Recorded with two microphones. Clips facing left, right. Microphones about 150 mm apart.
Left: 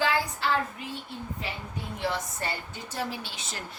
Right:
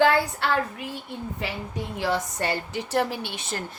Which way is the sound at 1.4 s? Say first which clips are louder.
Right 6 dB; 75° right (ahead or behind).